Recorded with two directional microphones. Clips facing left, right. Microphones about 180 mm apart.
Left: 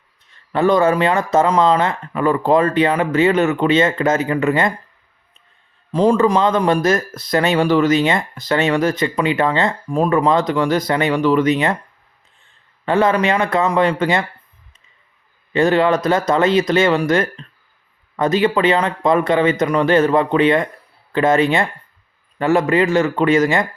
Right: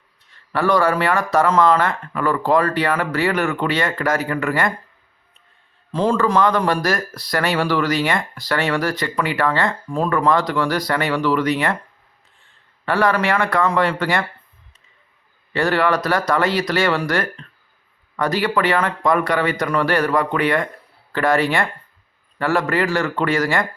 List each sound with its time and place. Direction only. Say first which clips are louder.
0.5 s speech: left 3 dB; 20° left (ahead or behind)
5.9 s speech: left 4 dB; 15° left (ahead or behind)
12.8 s speech: left 3 dB; 20° left (ahead or behind)
15.5 s speech: left 4 dB; 20° left (ahead or behind)